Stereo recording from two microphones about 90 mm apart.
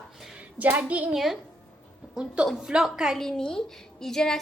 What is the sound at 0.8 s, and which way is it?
Speech, 15° right (ahead or behind).